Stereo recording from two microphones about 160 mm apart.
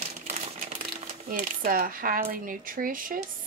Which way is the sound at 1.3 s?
60° right (ahead or behind).